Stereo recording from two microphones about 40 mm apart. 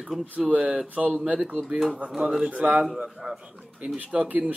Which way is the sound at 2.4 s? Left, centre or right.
Right.